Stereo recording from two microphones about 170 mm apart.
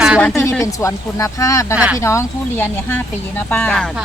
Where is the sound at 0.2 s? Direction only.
10° left (ahead or behind).